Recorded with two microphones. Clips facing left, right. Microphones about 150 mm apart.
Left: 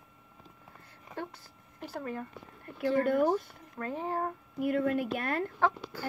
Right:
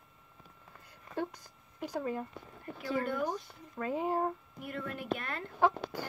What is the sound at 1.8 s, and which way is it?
Speech, 15° right (ahead or behind).